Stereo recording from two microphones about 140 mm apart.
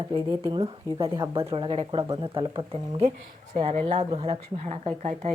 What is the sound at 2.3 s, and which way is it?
Speech, 40° right (ahead or behind).